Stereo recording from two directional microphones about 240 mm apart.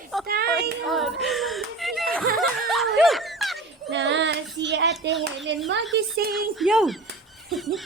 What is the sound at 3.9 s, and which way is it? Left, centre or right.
A child's voice, right.